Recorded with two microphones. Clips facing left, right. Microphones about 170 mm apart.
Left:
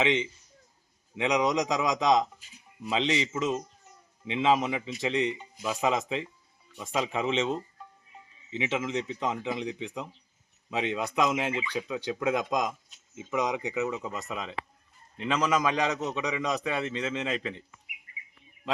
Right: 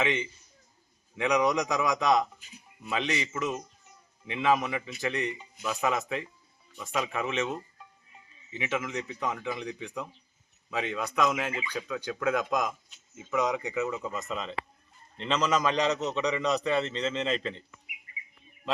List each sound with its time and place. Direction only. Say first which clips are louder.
0.0 s a man's voice: left 3 dB; 20° left (ahead or behind)